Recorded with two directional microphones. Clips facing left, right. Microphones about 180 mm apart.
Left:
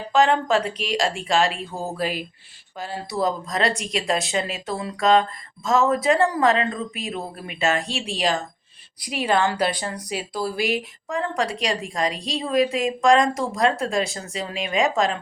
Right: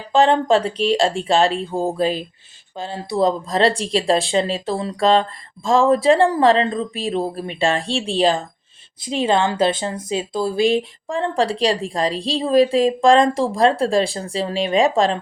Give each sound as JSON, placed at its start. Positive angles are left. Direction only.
{"t": 0.1, "sound": "speech", "side_deg": -30}